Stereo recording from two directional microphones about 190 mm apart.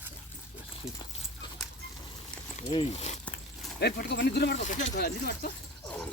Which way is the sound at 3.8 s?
60° left (ahead or behind).